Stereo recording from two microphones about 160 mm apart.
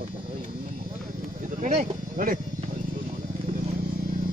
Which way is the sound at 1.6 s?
45° right (ahead or behind).